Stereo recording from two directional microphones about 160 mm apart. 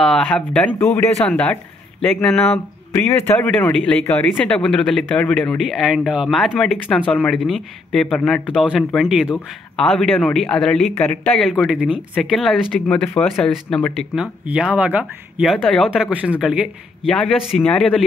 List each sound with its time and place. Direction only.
0.0 s speech: 5° left (ahead or behind)
5.7 s speech: centre (ahead or behind)
14.4 s speech: 5° right (ahead or behind)